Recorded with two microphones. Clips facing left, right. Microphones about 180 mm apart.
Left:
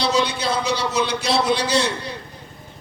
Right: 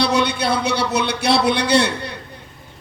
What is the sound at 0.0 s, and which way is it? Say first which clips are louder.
A man's voice: right 2 dB; 65° right (ahead or behind).